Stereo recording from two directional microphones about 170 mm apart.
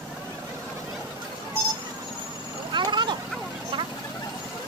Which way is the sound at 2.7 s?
25° right (ahead or behind).